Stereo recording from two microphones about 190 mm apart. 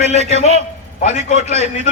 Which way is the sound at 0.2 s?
35° right (ahead or behind).